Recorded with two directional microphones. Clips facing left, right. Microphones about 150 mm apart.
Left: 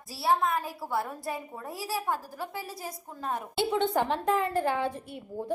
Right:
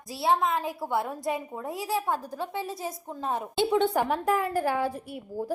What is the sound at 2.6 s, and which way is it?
A woman's voice, 25° right (ahead or behind).